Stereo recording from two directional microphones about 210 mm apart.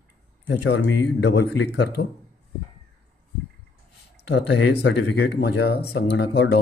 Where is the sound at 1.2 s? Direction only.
55° left (ahead or behind).